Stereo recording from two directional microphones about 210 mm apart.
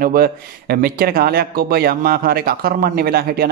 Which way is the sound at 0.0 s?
45° right (ahead or behind).